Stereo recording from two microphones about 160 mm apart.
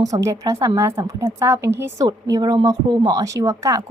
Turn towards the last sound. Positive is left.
turn(degrees=-20)  # may be behind; listen again after turning